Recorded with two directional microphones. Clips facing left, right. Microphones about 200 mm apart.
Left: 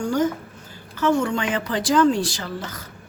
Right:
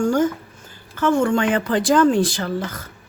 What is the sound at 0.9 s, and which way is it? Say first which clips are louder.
Speech: right 3 dB; 50° right (ahead or behind).